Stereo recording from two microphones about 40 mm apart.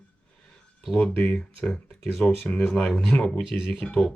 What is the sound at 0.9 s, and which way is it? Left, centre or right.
Speech, left.